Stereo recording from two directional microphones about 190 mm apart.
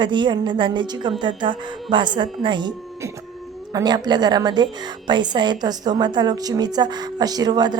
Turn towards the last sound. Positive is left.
turn(degrees=-20)  # may be behind; listen again after turning